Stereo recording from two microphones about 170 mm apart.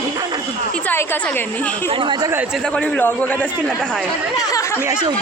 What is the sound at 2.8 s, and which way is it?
Speech, 10° left (ahead or behind).